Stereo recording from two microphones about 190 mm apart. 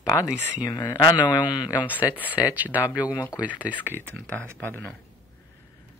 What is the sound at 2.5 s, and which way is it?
Speech, 10° right (ahead or behind).